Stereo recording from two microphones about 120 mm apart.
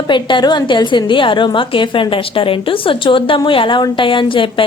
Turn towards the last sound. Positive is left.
turn(degrees=45)  # may be behind; listen again after turning